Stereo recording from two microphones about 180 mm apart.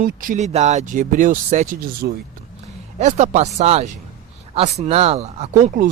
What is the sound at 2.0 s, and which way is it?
Speech, 60° right (ahead or behind).